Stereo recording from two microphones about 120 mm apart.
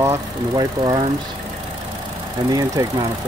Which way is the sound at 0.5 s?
35° right (ahead or behind).